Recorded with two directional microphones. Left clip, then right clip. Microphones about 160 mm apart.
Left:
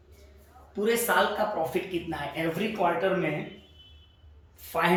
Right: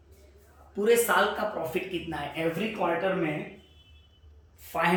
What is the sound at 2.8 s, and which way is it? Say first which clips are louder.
Speech: left 2 dB; centre (ahead or behind).